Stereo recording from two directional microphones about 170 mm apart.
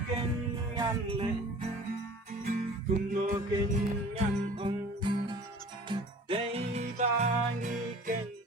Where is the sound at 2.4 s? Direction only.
55° right (ahead or behind).